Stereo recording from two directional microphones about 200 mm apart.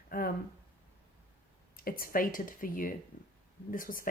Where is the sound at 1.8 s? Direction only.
45° left (ahead or behind).